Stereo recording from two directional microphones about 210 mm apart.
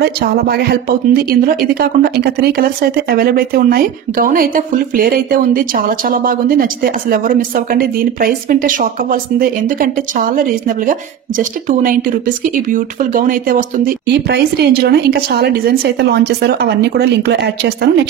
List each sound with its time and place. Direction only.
0.0 s speech: 50° right (ahead or behind)